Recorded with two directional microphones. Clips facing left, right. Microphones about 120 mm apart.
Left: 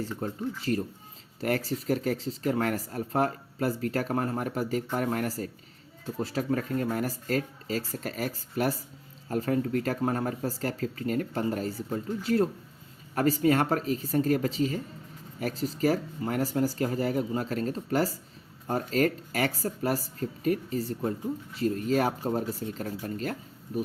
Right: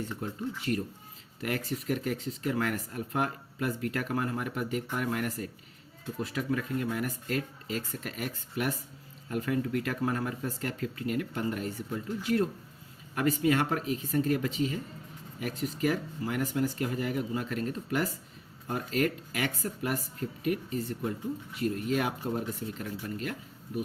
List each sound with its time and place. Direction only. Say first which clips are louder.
0.2 s speech: left 4 dB; 40° left (ahead or behind)
1.4 s speech: left 4 dB; 35° left (ahead or behind)